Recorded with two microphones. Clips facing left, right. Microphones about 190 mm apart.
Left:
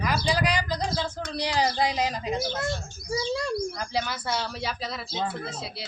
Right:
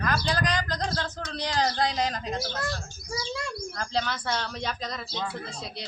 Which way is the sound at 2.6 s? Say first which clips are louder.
Left 3 dB; 25° left (ahead or behind).